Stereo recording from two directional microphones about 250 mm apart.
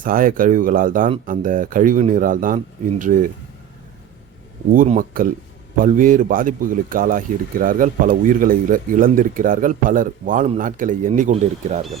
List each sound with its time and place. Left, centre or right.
0.0 s speech: right
4.7 s speech: right